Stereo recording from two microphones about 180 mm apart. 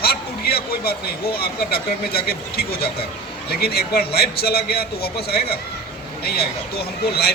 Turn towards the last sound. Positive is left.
turn(degrees=60)  # may be behind; listen again after turning